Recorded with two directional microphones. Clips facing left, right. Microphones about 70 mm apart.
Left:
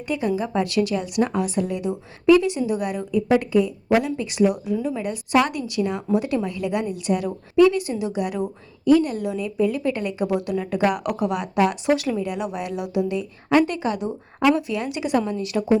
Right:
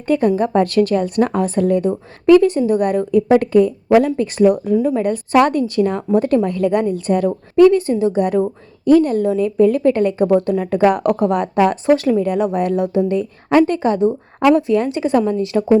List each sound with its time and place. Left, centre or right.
0.1 s a woman's voice: right